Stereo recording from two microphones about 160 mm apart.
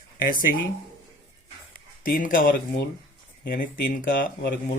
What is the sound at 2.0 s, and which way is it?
Speech, 60° left (ahead or behind).